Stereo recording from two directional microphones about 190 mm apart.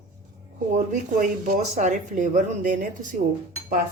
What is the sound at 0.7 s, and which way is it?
A woman's voice, 40° right (ahead or behind).